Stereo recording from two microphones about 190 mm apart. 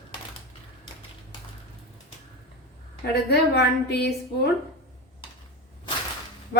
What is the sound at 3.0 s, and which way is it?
A woman's voice, 60° left (ahead or behind).